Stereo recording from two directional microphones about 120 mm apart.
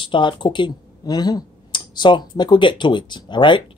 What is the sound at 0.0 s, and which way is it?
Speech, 45° left (ahead or behind).